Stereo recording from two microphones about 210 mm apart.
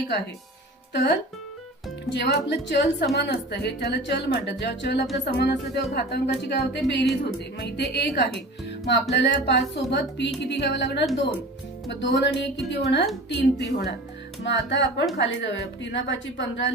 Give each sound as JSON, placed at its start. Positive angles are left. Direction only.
{"t": 0.9, "sound": "speech", "side_deg": 55}